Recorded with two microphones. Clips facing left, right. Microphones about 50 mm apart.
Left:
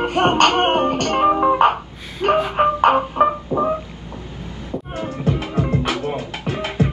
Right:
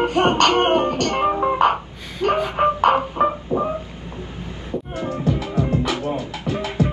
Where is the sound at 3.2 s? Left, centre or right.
Left.